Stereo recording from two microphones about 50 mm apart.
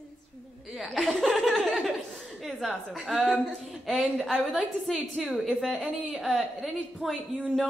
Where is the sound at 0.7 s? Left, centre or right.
Centre.